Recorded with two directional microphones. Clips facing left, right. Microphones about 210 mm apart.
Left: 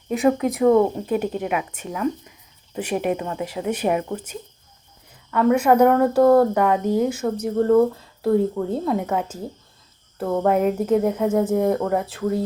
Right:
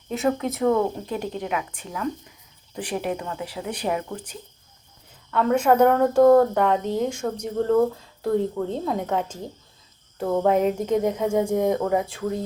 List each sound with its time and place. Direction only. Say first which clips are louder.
0.2 s speech: left 4 dB; 10° left (ahead or behind)
5.3 s speech: left 3 dB; 10° left (ahead or behind)